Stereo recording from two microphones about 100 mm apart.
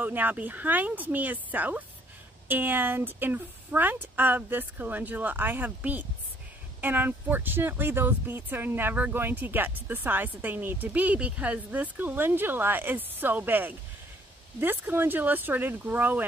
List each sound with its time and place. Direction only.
0.0 s speech: 15° right (ahead or behind)